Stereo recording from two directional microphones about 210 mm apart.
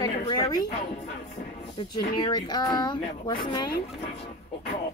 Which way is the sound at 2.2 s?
20° left (ahead or behind).